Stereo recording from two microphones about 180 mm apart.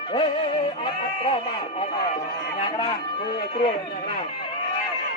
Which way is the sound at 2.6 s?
25° left (ahead or behind).